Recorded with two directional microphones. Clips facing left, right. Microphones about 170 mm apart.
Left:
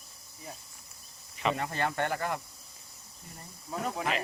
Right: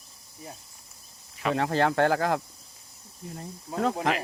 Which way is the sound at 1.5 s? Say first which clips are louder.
Right 8 dB; 90° right.